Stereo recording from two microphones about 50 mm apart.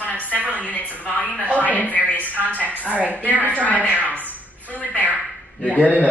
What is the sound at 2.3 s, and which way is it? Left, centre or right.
Speech, right.